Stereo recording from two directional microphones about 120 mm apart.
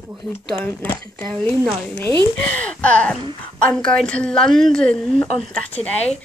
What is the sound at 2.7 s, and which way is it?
Speech, 10° left (ahead or behind).